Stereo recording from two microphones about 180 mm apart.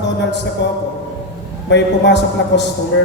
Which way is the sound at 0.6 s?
75° left (ahead or behind).